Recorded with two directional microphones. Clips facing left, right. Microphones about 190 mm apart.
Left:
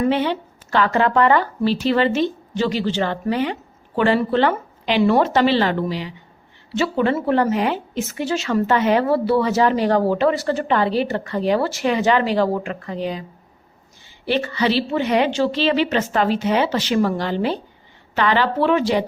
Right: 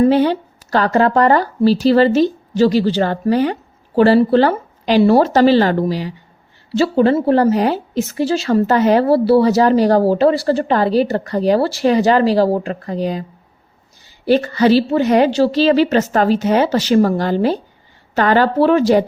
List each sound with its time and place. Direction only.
0.0 s a woman's voice: 40° right (ahead or behind)
14.3 s a woman's voice: 40° right (ahead or behind)